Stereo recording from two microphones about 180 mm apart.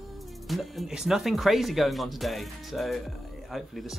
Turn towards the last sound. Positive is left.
turn(degrees=0)  # may be behind; listen again after turning